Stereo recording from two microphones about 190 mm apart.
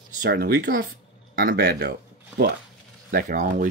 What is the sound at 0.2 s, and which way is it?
Speech, 55° right (ahead or behind).